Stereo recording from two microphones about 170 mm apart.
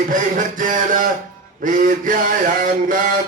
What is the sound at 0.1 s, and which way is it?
Speech, 50° right (ahead or behind).